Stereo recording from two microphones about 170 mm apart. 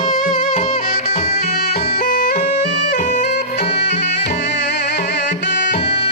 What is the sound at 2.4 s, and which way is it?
Music, 40° left (ahead or behind).